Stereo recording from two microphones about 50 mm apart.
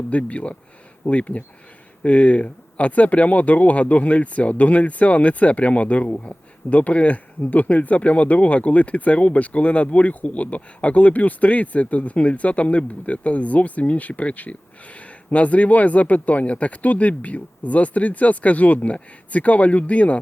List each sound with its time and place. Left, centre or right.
0.1 s speech: left